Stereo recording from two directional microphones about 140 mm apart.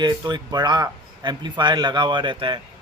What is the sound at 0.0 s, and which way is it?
A man's voice, 30° right (ahead or behind).